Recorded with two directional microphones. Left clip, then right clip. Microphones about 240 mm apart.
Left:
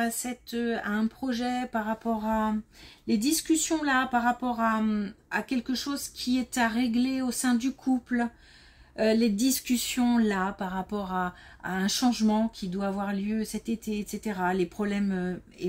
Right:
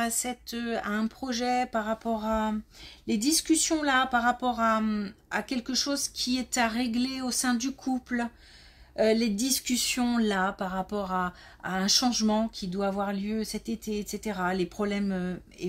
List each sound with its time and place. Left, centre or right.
0.0 s speech: right